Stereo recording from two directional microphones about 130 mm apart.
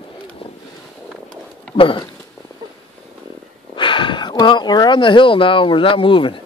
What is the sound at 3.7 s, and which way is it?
Speech, 40° left (ahead or behind).